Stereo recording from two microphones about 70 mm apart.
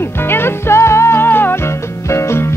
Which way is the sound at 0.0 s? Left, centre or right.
Left.